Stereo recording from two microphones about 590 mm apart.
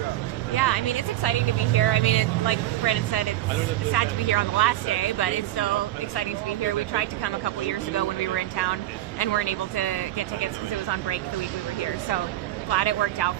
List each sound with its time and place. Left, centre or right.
0.5 s speech: left
6.9 s speech: left
12.7 s speech: left